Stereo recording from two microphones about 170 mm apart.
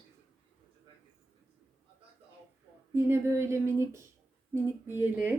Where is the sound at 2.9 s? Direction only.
15° right (ahead or behind).